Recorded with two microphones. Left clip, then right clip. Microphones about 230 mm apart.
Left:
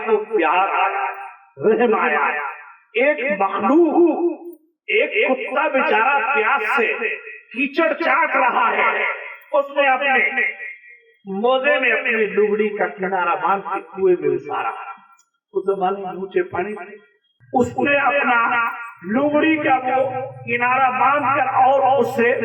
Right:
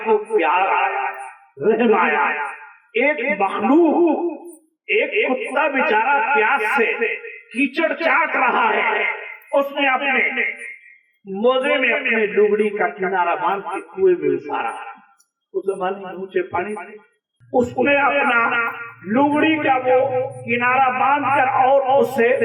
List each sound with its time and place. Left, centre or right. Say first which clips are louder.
0.0 s music: right 1 dB; right
1.6 s a man's voice: even; right
5.2 s a man's voice: even; right